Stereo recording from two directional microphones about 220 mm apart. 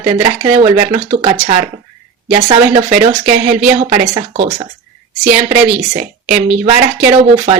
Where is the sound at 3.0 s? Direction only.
25° right (ahead or behind).